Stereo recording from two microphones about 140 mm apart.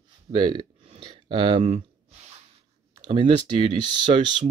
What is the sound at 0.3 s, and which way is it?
Speech, 30° right (ahead or behind).